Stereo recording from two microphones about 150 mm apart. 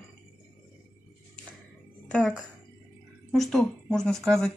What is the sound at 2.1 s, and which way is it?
Speech, 5° left (ahead or behind).